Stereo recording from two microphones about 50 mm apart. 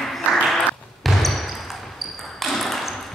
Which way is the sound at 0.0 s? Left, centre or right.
Centre.